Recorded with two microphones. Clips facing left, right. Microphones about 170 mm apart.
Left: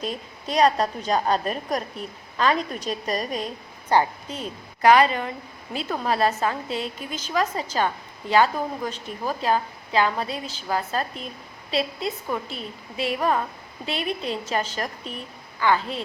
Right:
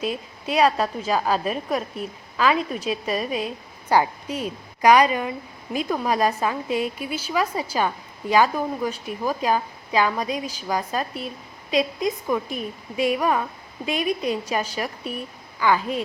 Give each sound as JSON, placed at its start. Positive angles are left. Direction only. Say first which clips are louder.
{"t": 0.0, "sound": "a woman's voice", "louder": "right 3 dB", "side_deg": -5}